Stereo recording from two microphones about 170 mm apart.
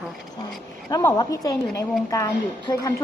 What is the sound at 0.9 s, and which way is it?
A woman's voice, 20° left (ahead or behind).